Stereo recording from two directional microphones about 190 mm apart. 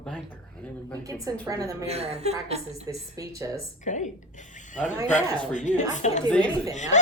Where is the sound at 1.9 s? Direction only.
35° right (ahead or behind).